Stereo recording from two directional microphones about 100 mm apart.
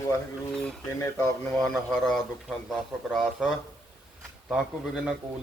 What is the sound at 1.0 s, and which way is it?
Speech, 25° left (ahead or behind).